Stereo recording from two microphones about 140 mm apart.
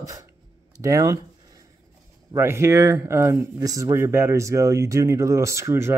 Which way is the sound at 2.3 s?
20° right (ahead or behind).